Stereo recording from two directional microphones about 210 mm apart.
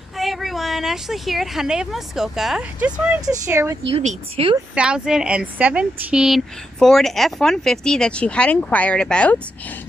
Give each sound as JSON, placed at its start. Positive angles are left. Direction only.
{"t": 0.2, "sound": "speech", "side_deg": 0}
{"t": 3.9, "sound": "speech", "side_deg": -30}
{"t": 4.7, "sound": "speech", "side_deg": -5}